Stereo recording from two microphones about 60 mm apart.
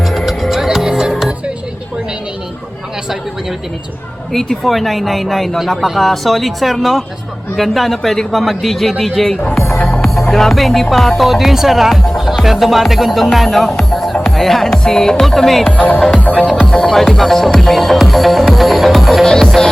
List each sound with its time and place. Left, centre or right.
0.0 s music: centre
4.3 s speech: centre
9.7 s music: centre
10.2 s speech: centre
13.7 s music: centre
15.6 s speech: left
16.1 s music: left
16.6 s speech: centre